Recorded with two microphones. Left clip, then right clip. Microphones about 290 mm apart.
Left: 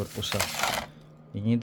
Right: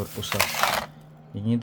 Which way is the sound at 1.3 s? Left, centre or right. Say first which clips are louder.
Right 1 dB; centre.